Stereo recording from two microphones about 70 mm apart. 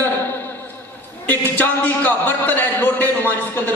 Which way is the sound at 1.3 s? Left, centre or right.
Left.